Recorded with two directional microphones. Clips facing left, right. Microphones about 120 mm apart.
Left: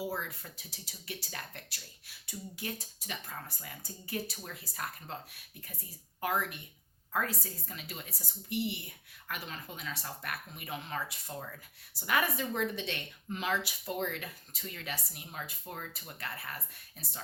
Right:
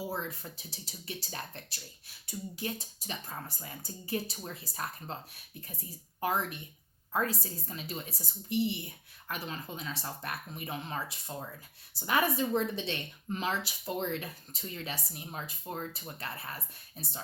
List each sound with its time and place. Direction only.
0.1 s speech: 30° right (ahead or behind)
6.1 s speech: 25° right (ahead or behind)
11.3 s speech: 20° right (ahead or behind)